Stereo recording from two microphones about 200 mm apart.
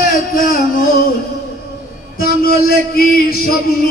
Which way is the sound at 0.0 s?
50° left (ahead or behind).